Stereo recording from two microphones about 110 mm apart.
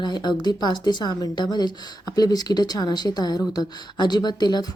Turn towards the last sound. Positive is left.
turn(degrees=40)  # may be behind; listen again after turning